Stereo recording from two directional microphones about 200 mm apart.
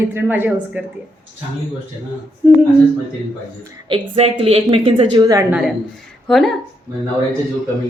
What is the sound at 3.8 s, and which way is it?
A woman's voice, 25° right (ahead or behind).